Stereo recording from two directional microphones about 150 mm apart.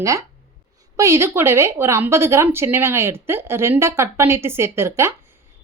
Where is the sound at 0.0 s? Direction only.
20° right (ahead or behind).